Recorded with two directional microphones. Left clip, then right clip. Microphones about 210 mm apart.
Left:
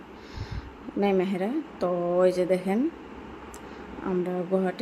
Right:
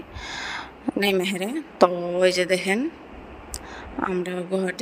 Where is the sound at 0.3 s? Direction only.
45° right (ahead or behind).